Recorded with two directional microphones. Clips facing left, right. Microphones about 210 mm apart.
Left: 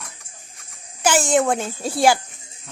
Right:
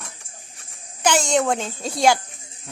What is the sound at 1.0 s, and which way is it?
Speech, 5° left (ahead or behind).